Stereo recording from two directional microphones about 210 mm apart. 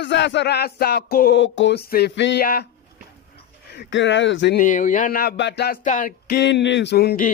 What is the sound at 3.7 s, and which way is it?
Speech, 55° left (ahead or behind).